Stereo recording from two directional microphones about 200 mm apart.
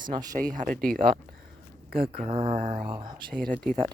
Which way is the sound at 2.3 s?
30° right (ahead or behind).